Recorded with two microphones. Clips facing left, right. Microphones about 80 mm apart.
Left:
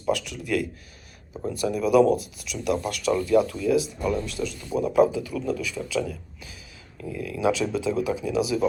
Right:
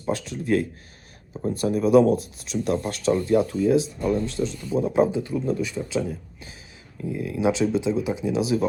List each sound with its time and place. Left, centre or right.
0.0 s speech: right